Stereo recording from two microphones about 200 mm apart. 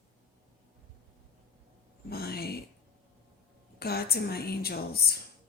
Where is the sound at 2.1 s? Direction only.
50° left (ahead or behind).